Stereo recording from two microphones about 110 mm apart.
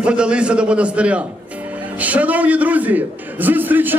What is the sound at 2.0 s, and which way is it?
A man's voice, 15° right (ahead or behind).